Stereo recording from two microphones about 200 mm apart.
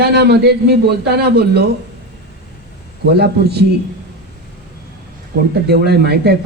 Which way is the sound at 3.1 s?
55° right (ahead or behind).